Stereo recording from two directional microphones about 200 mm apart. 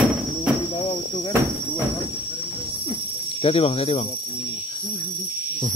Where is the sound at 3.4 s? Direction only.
30° left (ahead or behind).